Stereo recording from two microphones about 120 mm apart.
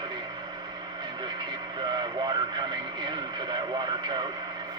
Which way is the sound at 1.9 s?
40° right (ahead or behind).